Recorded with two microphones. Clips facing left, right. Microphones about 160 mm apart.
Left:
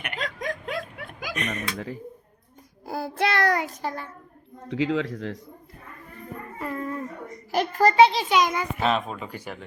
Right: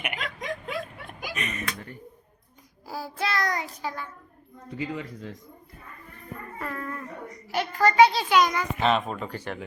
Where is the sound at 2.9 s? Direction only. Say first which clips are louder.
Left 5 dB; 55° left (ahead or behind).